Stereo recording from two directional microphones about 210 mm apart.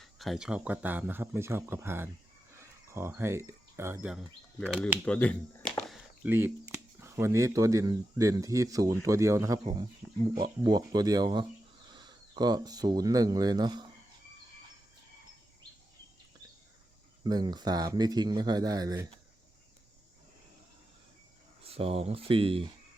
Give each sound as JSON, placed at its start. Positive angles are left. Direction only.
{"t": 0.0, "sound": "speech", "side_deg": 0}
{"t": 5.0, "sound": "speech", "side_deg": 5}
{"t": 6.2, "sound": "speech", "side_deg": -10}
{"t": 17.2, "sound": "speech", "side_deg": -20}
{"t": 21.6, "sound": "speech", "side_deg": -25}